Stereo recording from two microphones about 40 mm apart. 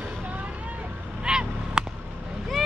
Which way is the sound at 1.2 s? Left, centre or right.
Right.